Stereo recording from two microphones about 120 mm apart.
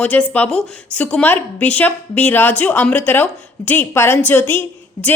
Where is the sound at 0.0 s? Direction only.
15° left (ahead or behind).